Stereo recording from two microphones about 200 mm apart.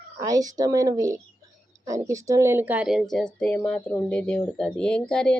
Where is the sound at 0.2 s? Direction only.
20° right (ahead or behind).